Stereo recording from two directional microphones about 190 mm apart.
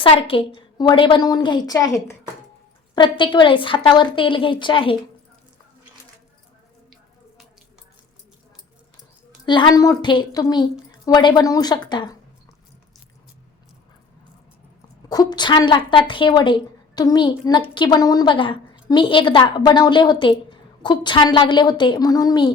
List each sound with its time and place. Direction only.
0.0 s a woman's voice: 25° left (ahead or behind)
9.5 s a woman's voice: 25° left (ahead or behind)
15.1 s a woman's voice: 20° left (ahead or behind)